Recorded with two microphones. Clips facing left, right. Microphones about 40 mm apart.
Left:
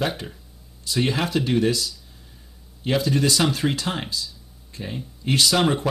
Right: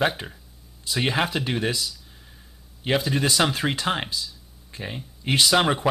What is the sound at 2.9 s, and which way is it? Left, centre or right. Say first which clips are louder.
Speech: left 2 dB; centre.